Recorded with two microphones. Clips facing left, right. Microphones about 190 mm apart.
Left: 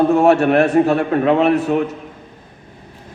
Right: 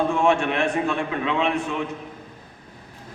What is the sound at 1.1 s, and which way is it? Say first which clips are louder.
Speech: left 12 dB; 45° left (ahead or behind).